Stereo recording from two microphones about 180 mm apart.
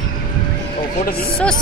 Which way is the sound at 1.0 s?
55° left (ahead or behind).